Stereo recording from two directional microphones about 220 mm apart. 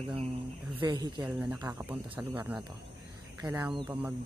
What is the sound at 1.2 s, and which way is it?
Speech, 5° right (ahead or behind).